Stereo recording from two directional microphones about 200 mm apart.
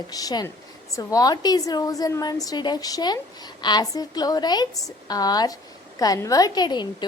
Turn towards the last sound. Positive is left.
turn(degrees=20)  # may be behind; listen again after turning